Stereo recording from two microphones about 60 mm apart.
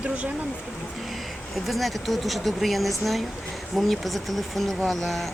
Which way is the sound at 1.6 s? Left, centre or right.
Centre.